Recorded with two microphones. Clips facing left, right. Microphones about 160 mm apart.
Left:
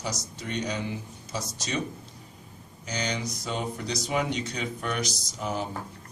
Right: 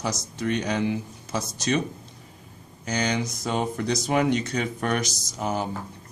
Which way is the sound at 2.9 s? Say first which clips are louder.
Right 5 dB; 50° right (ahead or behind).